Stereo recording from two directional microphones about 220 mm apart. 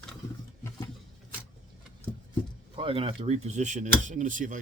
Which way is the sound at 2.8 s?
25° right (ahead or behind).